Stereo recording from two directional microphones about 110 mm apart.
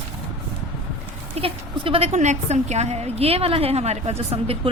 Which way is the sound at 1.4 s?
55° right (ahead or behind).